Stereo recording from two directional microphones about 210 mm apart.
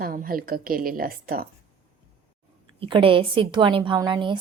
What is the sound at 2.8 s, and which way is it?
A woman's voice, 25° right (ahead or behind).